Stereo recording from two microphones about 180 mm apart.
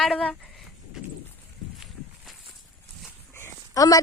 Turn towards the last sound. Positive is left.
turn(degrees=20)  # may be behind; listen again after turning